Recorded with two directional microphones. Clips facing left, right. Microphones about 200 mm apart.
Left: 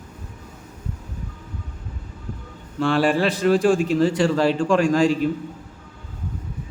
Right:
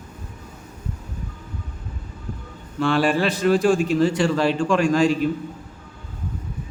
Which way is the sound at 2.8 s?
35° left (ahead or behind).